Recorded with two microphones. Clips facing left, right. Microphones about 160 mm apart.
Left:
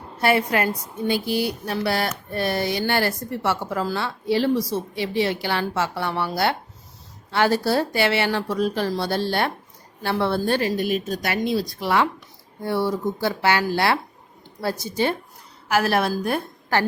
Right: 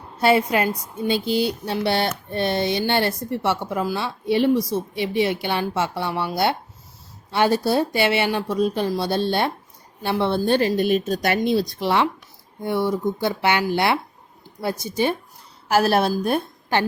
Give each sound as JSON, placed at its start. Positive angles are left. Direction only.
{"t": 0.2, "sound": "a woman's voice", "side_deg": -20}
{"t": 15.7, "sound": "a woman's voice", "side_deg": -30}